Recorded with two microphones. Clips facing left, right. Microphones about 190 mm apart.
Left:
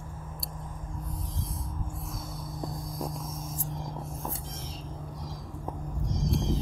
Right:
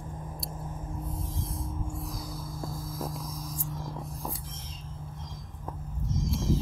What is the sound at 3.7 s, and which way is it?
Vehicle, 15° left (ahead or behind).